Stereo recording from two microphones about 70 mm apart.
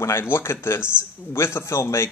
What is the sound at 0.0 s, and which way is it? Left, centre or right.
Speech, left.